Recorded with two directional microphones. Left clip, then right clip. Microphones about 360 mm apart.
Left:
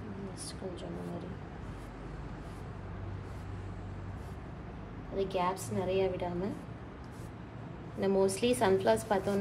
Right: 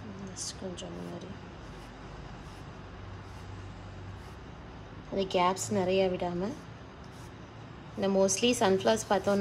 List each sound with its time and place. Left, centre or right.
5.1 s a woman's voice: centre
8.0 s a woman's voice: centre